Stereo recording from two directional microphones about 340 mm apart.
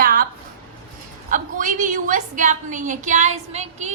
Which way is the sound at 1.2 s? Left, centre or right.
Right.